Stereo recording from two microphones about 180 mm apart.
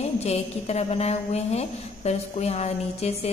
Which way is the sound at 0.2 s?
35° left (ahead or behind).